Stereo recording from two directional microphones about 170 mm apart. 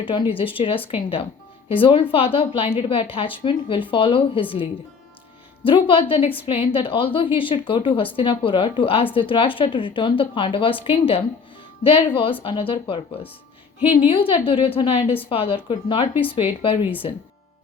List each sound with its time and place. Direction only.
0.0 s a woman's voice: 30° left (ahead or behind)
13.7 s a woman's voice: 10° right (ahead or behind)
14.1 s a woman's voice: 30° left (ahead or behind)